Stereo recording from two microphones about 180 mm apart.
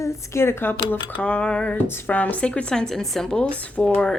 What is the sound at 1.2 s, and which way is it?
Speech, 5° left (ahead or behind).